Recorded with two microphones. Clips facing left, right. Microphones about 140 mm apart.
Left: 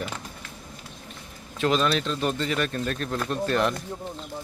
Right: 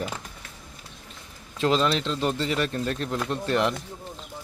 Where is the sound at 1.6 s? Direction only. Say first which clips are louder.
Even; 25° right (ahead or behind).